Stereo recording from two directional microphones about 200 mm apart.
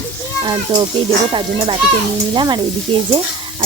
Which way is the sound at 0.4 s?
25° right (ahead or behind).